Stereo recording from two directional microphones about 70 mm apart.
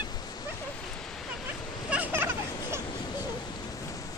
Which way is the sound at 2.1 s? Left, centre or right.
Right.